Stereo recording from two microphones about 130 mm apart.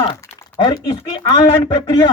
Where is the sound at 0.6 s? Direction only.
35° left (ahead or behind).